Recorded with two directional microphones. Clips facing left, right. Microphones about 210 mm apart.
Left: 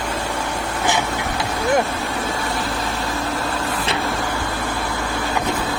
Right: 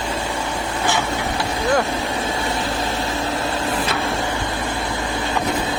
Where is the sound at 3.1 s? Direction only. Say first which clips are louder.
Right 1 dB; 20° right (ahead or behind).